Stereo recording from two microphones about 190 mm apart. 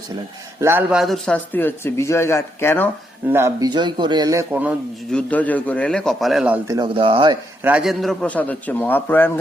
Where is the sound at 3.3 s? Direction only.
15° right (ahead or behind).